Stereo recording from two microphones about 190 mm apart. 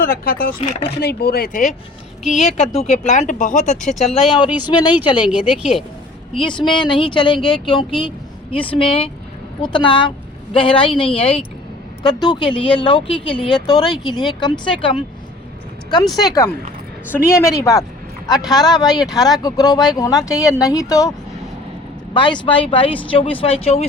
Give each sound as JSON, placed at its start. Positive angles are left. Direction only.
{"t": 0.0, "sound": "speech", "side_deg": 50}
{"t": 2.4, "sound": "speech", "side_deg": 35}
{"t": 4.6, "sound": "speech", "side_deg": 25}
{"t": 5.2, "sound": "speech", "side_deg": -5}
{"t": 6.3, "sound": "speech", "side_deg": 25}
{"t": 22.1, "sound": "speech", "side_deg": 25}